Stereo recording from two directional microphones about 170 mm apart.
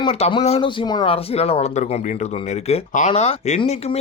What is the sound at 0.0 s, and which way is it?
Speech, 30° left (ahead or behind).